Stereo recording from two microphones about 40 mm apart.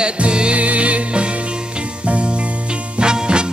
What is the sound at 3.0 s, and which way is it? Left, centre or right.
Music, right.